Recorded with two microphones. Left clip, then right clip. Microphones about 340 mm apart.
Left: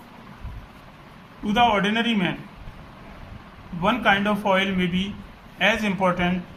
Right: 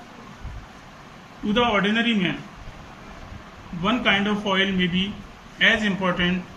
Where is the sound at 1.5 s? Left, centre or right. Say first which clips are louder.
Left 1 dB; centre.